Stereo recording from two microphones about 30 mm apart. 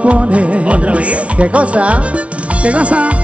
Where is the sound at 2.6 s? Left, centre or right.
Right.